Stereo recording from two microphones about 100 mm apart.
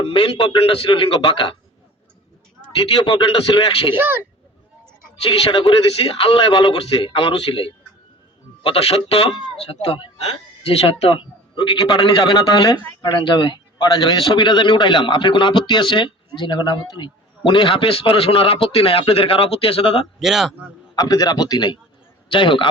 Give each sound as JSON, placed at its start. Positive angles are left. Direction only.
{"t": 0.0, "sound": "a man's voice", "side_deg": 65}
{"t": 2.7, "sound": "a man's voice", "side_deg": 65}
{"t": 3.9, "sound": "speech", "side_deg": -20}
{"t": 5.2, "sound": "a man's voice", "side_deg": 70}
{"t": 8.6, "sound": "a man's voice", "side_deg": 75}
{"t": 9.6, "sound": "a man's voice", "side_deg": 70}
{"t": 13.0, "sound": "a man's voice", "side_deg": 50}
{"t": 20.1, "sound": "speech", "side_deg": -5}
{"t": 20.9, "sound": "a man's voice", "side_deg": 35}
{"t": 22.3, "sound": "a man's voice", "side_deg": 55}